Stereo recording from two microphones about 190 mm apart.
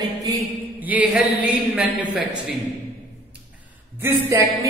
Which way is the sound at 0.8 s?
5° right (ahead or behind).